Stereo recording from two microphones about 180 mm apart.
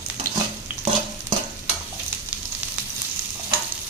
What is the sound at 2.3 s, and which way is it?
Sizzle, 5° right (ahead or behind).